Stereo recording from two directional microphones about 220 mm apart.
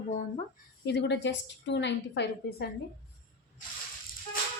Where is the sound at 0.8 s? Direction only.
50° left (ahead or behind).